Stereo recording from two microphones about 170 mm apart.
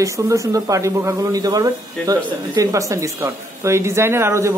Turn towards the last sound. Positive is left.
turn(degrees=-15)  # may be behind; listen again after turning